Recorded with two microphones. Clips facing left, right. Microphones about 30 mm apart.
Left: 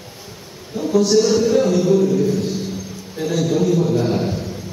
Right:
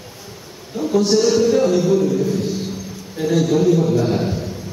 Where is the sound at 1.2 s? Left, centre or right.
Centre.